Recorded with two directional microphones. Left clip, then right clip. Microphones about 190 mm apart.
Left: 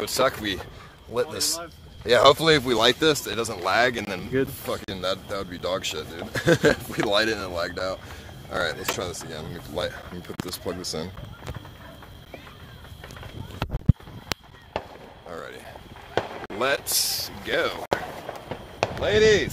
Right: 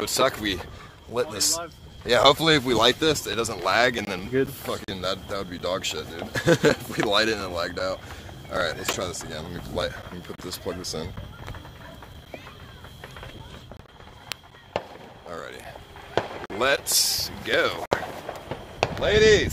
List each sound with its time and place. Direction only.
0.0 s speech: 10° right (ahead or behind)
2.0 s speech: 5° left (ahead or behind)
10.2 s speech: 30° left (ahead or behind)
14.7 s fireworks: 25° right (ahead or behind)
15.2 s a sound: 5° left (ahead or behind)
16.2 s a sound: 40° left (ahead or behind)
16.5 s speech: 5° right (ahead or behind)
18.9 s speech: centre (ahead or behind)